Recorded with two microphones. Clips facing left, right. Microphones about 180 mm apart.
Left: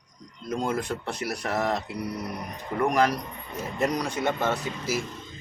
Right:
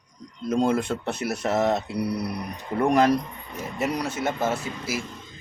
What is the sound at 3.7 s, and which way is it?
Speech, 5° right (ahead or behind).